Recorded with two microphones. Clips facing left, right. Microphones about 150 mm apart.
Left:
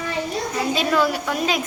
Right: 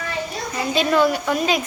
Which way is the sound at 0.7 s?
Centre (ahead or behind).